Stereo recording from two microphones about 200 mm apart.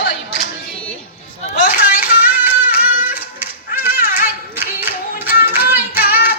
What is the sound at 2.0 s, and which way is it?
Music, 10° right (ahead or behind).